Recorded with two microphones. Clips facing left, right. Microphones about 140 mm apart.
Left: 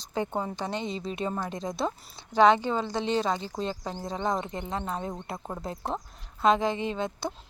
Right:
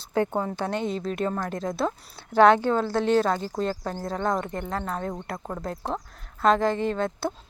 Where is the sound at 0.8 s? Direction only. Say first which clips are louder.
Right 5 dB; 50° right (ahead or behind).